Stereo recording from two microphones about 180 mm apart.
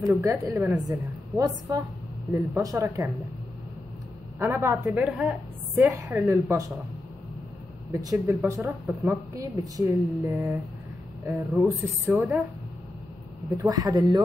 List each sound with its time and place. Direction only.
0.1 s speech: 15° right (ahead or behind)
4.4 s a woman's voice: 15° right (ahead or behind)
5.8 s speech: 15° right (ahead or behind)
7.9 s speech: 15° right (ahead or behind)
13.6 s speech: 20° right (ahead or behind)